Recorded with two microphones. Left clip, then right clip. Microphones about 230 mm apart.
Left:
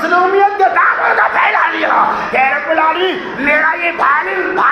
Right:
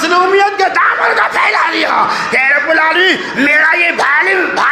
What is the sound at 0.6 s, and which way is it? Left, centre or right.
Music, right.